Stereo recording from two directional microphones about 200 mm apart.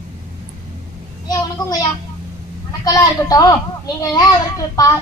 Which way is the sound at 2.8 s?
20° left (ahead or behind).